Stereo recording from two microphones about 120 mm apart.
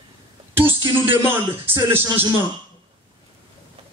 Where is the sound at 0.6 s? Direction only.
20° right (ahead or behind).